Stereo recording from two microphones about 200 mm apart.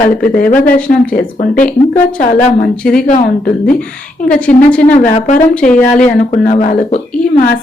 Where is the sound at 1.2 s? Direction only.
40° left (ahead or behind).